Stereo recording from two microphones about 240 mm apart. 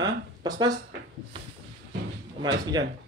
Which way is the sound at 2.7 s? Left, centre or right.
Centre.